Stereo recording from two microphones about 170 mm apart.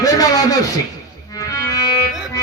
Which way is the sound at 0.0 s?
20° left (ahead or behind).